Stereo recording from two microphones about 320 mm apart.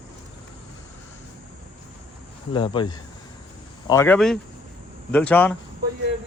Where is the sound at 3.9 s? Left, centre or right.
Centre.